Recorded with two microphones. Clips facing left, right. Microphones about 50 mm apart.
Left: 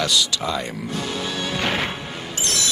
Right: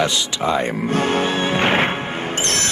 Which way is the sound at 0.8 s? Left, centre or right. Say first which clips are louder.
Right 8 dB; right.